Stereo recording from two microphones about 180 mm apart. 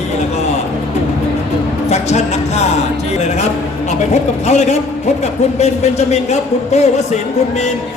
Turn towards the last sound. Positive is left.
turn(degrees=35)  # may be behind; listen again after turning